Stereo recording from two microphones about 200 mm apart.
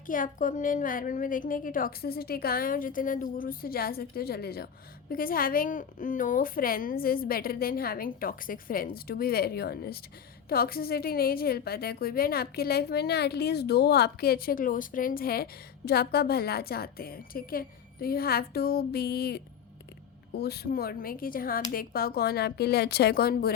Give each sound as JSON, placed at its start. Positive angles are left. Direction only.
{"t": 0.1, "sound": "a woman's voice", "side_deg": 40}